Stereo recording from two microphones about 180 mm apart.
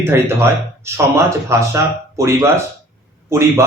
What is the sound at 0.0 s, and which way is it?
Speech, 15° right (ahead or behind).